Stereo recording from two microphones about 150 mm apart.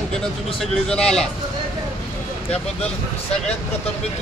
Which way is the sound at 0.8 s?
5° left (ahead or behind).